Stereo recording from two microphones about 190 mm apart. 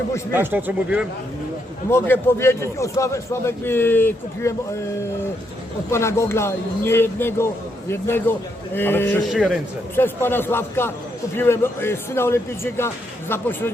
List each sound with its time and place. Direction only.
0.3 s speech: 10° right (ahead or behind)
1.9 s speech: 10° left (ahead or behind)
5.9 s speech: 15° left (ahead or behind)
9.3 s a man's voice: centre (ahead or behind)
9.9 s speech: 10° left (ahead or behind)